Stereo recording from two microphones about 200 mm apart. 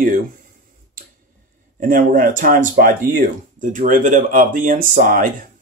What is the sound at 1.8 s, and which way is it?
Speech, 45° right (ahead or behind).